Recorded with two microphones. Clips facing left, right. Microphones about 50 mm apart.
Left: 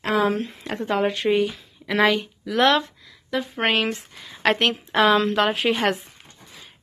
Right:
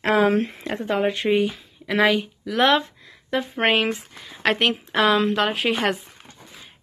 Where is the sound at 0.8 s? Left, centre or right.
Centre.